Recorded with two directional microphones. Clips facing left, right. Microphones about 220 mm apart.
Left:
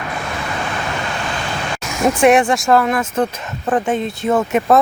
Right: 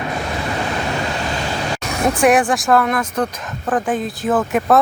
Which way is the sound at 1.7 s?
35° right (ahead or behind).